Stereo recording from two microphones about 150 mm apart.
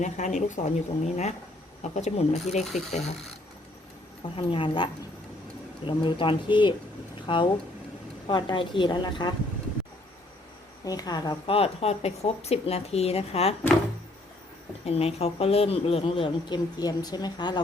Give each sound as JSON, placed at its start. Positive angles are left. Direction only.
{"t": 0.0, "sound": "speech", "side_deg": 55}
{"t": 4.2, "sound": "speech", "side_deg": 35}
{"t": 10.8, "sound": "a woman's voice", "side_deg": 25}
{"t": 11.5, "sound": "speech", "side_deg": 40}
{"t": 14.8, "sound": "speech", "side_deg": 45}